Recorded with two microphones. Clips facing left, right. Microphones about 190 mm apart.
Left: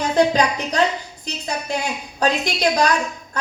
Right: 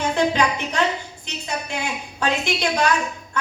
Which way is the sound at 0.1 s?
40° left (ahead or behind).